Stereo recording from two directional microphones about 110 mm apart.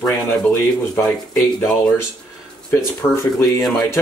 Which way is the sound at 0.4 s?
15° left (ahead or behind).